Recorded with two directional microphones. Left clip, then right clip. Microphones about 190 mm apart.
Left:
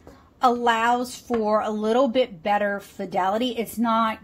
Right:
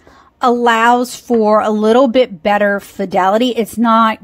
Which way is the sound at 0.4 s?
50° right (ahead or behind).